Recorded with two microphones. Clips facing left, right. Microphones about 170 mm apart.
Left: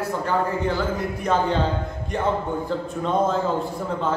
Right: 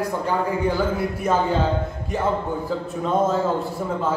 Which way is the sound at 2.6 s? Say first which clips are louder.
Right 1 dB; 5° right (ahead or behind).